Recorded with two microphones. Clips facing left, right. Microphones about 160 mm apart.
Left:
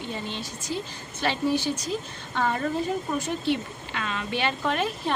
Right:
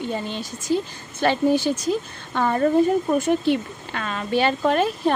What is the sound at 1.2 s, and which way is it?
A woman's voice, 50° right (ahead or behind).